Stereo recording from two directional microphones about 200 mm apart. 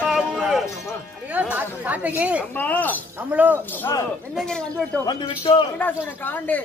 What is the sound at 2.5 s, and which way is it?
Speech, 10° left (ahead or behind).